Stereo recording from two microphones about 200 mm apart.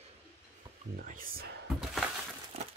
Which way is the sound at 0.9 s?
45° right (ahead or behind).